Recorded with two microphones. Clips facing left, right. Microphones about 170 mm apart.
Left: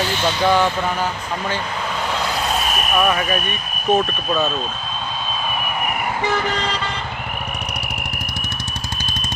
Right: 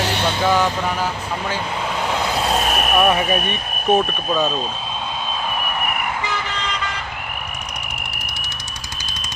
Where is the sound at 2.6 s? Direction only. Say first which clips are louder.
Right 3 dB; 50° right (ahead or behind).